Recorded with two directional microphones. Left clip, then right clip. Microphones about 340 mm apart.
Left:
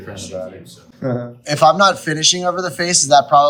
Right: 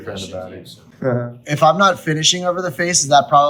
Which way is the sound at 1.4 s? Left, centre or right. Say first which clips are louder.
Left 2 dB; centre.